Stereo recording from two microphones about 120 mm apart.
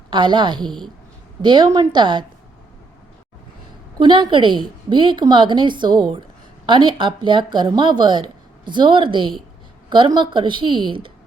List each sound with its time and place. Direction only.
0.1 s speech: 40° right (ahead or behind)
3.9 s a woman's voice: 40° right (ahead or behind)